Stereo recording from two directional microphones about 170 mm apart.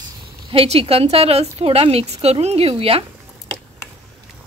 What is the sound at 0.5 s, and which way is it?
A woman's voice, 35° right (ahead or behind).